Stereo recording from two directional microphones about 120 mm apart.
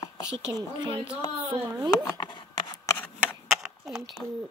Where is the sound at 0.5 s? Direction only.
35° right (ahead or behind).